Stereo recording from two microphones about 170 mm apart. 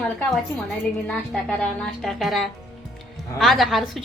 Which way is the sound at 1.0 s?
5° left (ahead or behind).